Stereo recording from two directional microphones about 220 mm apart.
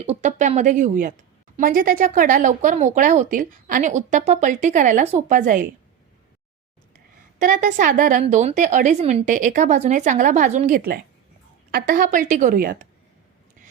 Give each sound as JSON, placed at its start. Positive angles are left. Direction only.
{"t": 0.0, "sound": "speech", "side_deg": -30}
{"t": 7.3, "sound": "speech", "side_deg": -35}